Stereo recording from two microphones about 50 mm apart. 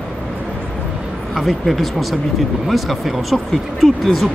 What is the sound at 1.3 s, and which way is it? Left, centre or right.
Speech, centre.